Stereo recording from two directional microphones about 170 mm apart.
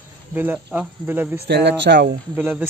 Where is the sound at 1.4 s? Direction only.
85° right.